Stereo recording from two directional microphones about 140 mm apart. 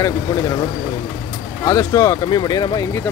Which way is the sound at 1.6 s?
25° left (ahead or behind).